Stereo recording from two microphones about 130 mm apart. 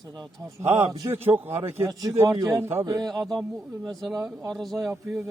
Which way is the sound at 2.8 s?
35° right (ahead or behind).